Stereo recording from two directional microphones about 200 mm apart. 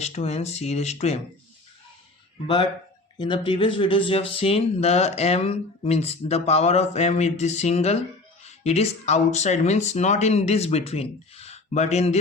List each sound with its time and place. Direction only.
0.0 s speech: 35° left (ahead or behind)
3.2 s speech: 25° left (ahead or behind)